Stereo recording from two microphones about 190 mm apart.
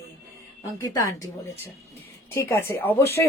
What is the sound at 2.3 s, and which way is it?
Speech, 15° left (ahead or behind).